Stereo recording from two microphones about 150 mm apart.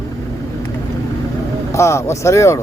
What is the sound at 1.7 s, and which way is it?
Speech, 20° left (ahead or behind).